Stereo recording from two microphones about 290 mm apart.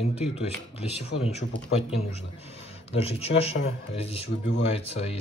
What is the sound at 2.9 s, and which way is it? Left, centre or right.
Speech, centre.